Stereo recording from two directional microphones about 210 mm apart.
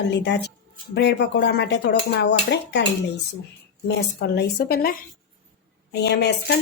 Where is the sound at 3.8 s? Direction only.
55° left (ahead or behind).